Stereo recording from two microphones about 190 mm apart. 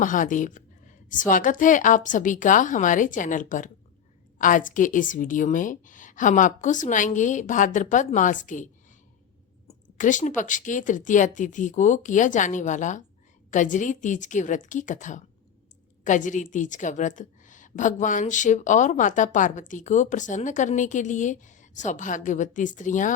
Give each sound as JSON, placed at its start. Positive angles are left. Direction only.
{"t": 0.0, "sound": "a woman's voice", "side_deg": 45}
{"t": 10.0, "sound": "a woman's voice", "side_deg": 40}